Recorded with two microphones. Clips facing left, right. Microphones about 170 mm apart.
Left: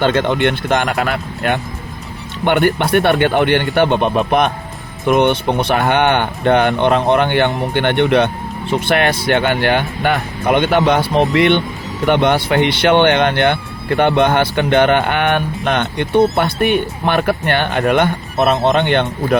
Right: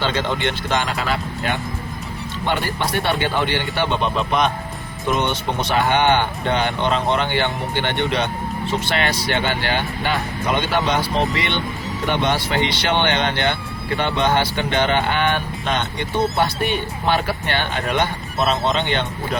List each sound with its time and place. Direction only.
0.0 s speech: 55° left (ahead or behind)